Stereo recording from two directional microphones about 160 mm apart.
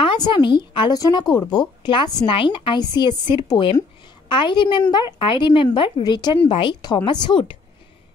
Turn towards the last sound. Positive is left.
turn(degrees=30)  # may be behind; listen again after turning